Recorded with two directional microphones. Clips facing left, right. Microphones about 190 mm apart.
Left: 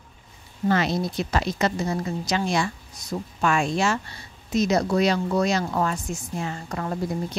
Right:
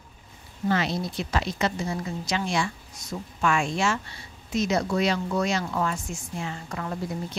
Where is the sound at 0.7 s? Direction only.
45° left (ahead or behind).